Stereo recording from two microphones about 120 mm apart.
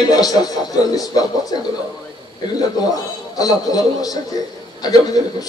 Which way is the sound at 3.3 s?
30° left (ahead or behind).